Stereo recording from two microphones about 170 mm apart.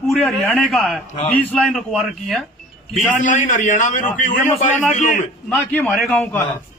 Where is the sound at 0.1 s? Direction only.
5° left (ahead or behind).